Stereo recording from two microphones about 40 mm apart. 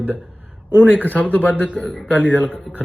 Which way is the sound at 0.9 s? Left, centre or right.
Left.